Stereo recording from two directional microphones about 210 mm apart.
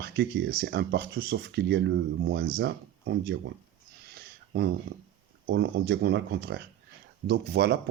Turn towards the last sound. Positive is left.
turn(degrees=-50)  # may be behind; listen again after turning